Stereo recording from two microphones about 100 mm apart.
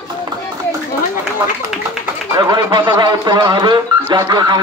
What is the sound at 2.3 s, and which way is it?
A man's voice, 40° right (ahead or behind).